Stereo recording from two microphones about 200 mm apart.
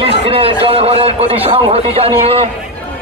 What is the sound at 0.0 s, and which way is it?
A man's voice, 25° right (ahead or behind).